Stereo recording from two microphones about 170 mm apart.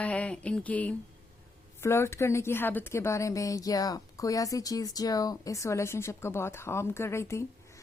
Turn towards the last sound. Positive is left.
turn(degrees=15)  # may be behind; listen again after turning